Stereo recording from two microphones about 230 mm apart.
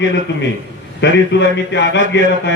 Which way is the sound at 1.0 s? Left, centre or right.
Left.